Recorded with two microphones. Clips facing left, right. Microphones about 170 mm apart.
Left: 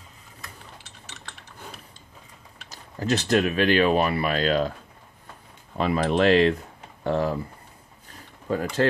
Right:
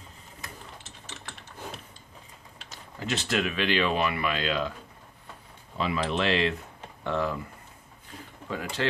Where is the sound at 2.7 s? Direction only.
40° left (ahead or behind).